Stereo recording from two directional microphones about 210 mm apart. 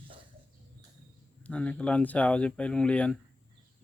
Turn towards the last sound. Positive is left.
turn(degrees=5)  # may be behind; listen again after turning